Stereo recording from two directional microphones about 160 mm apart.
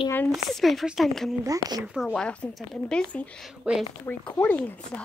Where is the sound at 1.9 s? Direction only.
5° left (ahead or behind).